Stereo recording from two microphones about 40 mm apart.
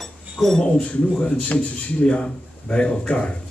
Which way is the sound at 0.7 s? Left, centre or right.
Left.